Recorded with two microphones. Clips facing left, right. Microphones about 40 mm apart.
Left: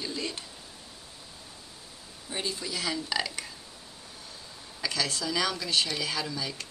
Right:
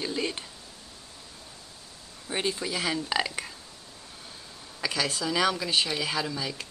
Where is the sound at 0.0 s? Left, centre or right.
Right.